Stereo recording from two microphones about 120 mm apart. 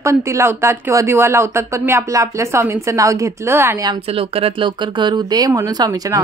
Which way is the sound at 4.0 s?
55° right (ahead or behind).